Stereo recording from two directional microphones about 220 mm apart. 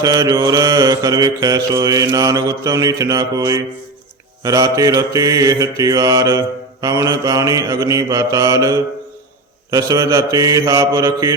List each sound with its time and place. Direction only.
0.0 s mantra: 15° right (ahead or behind)